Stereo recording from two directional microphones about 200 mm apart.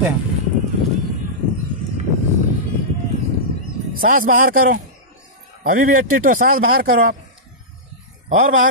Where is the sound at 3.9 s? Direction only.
45° right (ahead or behind).